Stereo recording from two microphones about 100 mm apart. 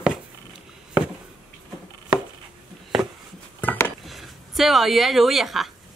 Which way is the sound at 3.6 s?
25° left (ahead or behind).